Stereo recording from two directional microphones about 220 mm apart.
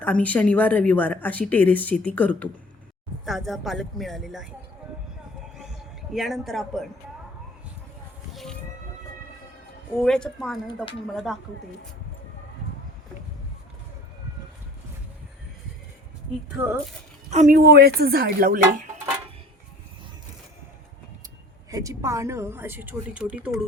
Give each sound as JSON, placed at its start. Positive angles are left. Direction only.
{"t": 0.0, "sound": "speech", "side_deg": 5}
{"t": 5.5, "sound": "a sound", "side_deg": 0}
{"t": 10.0, "sound": "speech", "side_deg": 0}
{"t": 17.2, "sound": "speech", "side_deg": -35}
{"t": 21.7, "sound": "a woman's voice", "side_deg": -15}